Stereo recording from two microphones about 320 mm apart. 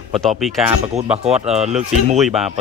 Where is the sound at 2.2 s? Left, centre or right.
Centre.